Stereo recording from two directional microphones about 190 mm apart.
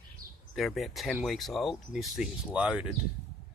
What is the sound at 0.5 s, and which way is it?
Speech, centre (ahead or behind).